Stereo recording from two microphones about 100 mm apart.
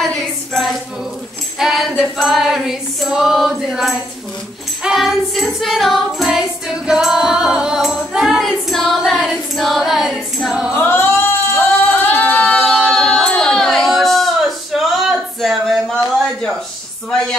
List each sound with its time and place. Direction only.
0.0 s a sound: 5° left (ahead or behind)
1.6 s female singing: 5° right (ahead or behind)
4.8 s music: centre (ahead or behind)
10.7 s singing: 20° left (ahead or behind); by 16.0 s centre (ahead or behind)